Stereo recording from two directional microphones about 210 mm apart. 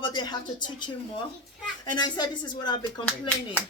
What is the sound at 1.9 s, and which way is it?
Speech, 20° left (ahead or behind).